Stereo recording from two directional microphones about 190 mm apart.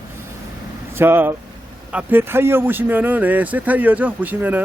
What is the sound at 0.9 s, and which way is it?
Speech, 10° right (ahead or behind).